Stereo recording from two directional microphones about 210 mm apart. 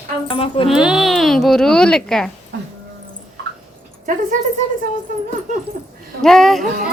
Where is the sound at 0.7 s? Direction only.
5° right (ahead or behind).